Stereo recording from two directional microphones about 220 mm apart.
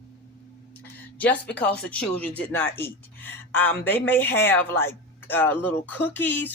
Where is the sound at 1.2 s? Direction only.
5° left (ahead or behind).